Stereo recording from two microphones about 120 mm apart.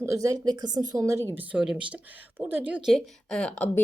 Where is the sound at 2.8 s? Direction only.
Centre (ahead or behind).